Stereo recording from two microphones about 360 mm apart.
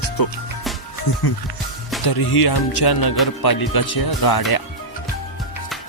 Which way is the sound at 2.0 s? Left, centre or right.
Left.